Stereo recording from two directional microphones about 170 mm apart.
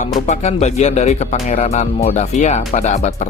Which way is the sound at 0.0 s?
40° left (ahead or behind).